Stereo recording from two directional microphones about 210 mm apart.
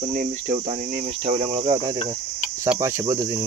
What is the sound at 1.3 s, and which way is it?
Cricket, 25° right (ahead or behind).